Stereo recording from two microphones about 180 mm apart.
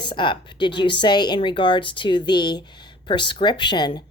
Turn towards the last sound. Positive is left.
turn(degrees=25)  # may be behind; listen again after turning